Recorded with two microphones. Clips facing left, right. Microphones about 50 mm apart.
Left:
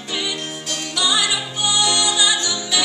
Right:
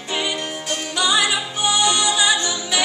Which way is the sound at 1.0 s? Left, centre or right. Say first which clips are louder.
Right 1 dB; right.